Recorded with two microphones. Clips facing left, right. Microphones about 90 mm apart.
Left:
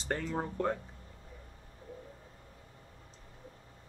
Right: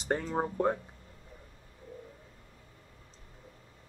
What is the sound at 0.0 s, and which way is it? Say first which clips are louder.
Speech: right 4 dB; 20° right (ahead or behind).